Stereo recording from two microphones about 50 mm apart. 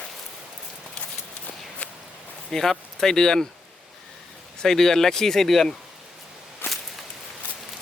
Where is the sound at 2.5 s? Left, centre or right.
Centre.